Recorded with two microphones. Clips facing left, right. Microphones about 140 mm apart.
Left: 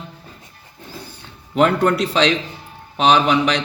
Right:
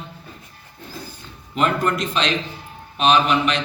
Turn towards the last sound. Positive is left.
turn(degrees=80)